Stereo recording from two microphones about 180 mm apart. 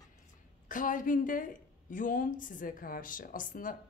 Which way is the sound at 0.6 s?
50° left (ahead or behind).